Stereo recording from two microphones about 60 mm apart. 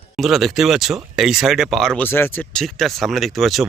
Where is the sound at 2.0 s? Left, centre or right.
Left.